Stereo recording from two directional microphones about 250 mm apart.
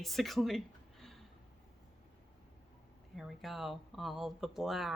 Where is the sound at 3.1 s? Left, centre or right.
Centre.